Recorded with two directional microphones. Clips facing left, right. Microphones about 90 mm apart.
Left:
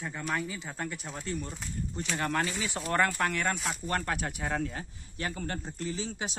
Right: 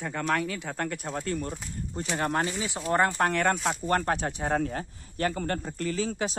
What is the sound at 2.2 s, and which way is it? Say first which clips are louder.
Speech: right 3 dB; 30° right (ahead or behind).